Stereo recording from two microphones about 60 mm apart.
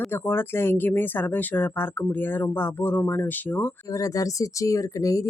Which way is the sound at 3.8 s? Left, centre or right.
Left.